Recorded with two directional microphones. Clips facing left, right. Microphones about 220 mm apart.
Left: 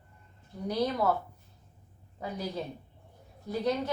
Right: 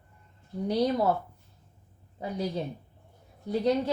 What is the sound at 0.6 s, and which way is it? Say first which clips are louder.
Speech: right 3 dB; 30° right (ahead or behind).